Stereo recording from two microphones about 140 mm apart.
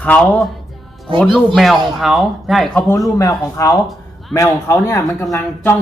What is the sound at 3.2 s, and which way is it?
A man's voice, 25° left (ahead or behind).